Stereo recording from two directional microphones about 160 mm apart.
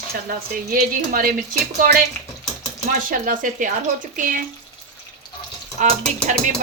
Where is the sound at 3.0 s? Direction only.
60° right (ahead or behind).